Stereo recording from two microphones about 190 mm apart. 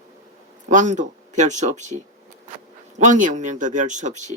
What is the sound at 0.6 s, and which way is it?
Speech, 40° right (ahead or behind).